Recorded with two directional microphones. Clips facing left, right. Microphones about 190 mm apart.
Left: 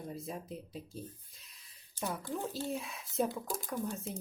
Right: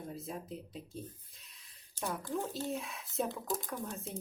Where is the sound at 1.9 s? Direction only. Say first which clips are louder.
Right 1 dB; 15° left (ahead or behind).